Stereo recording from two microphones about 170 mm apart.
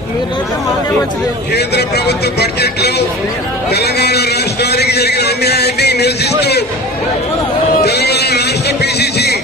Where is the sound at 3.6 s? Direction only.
75° left (ahead or behind).